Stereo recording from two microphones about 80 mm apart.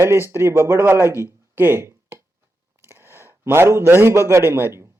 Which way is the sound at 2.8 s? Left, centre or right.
Right.